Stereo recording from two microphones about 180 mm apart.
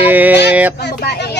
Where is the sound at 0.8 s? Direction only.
65° left (ahead or behind).